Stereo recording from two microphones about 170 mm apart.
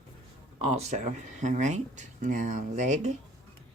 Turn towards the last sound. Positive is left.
turn(degrees=-45)  # may be behind; listen again after turning